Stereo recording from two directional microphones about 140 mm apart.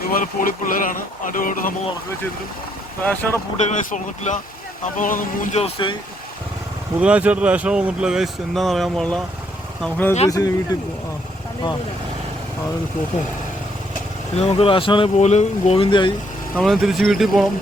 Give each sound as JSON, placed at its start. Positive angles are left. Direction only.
{"t": 0.1, "sound": "speech", "side_deg": 75}
{"t": 3.0, "sound": "speech", "side_deg": 15}
{"t": 3.6, "sound": "speech", "side_deg": 60}
{"t": 4.9, "sound": "speech", "side_deg": 70}
{"t": 5.5, "sound": "speech", "side_deg": 40}
{"t": 7.0, "sound": "speech", "side_deg": -10}
{"t": 10.2, "sound": "speech", "side_deg": 25}
{"t": 14.3, "sound": "speech", "side_deg": 45}
{"t": 15.2, "sound": "speech", "side_deg": 55}
{"t": 16.6, "sound": "speech", "side_deg": 0}